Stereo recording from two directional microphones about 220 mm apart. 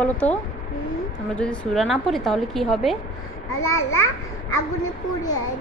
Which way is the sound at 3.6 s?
15° left (ahead or behind).